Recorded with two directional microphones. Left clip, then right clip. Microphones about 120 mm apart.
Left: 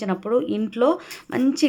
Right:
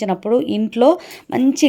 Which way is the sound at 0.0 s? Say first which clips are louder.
Right 5 dB; 40° right (ahead or behind).